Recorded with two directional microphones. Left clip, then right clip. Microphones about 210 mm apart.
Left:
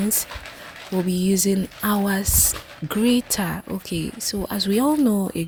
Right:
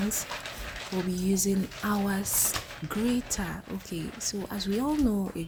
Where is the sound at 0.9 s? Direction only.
35° left (ahead or behind).